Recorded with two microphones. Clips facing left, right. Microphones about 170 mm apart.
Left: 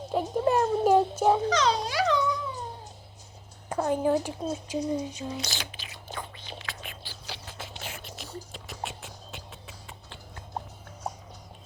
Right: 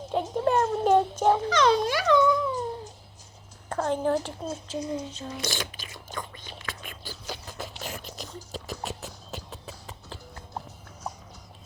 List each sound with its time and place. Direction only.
0.1 s child singing: 5° left (ahead or behind)
1.5 s speech: 55° right (ahead or behind)
3.7 s a child's voice: 10° left (ahead or behind)
5.4 s whispering: 50° right (ahead or behind)
8.5 s a sound: 40° right (ahead or behind)